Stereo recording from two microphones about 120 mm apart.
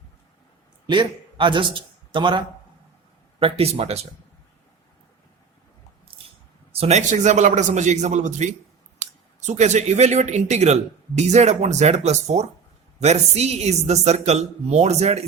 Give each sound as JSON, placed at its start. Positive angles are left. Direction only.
{"t": 0.9, "sound": "a man's voice", "side_deg": -40}
{"t": 3.4, "sound": "a woman's voice", "side_deg": -55}
{"t": 6.7, "sound": "a man's voice", "side_deg": -65}
{"t": 9.5, "sound": "a woman's voice", "side_deg": -75}